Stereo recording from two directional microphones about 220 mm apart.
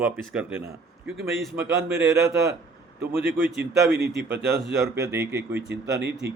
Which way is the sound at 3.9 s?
45° right (ahead or behind).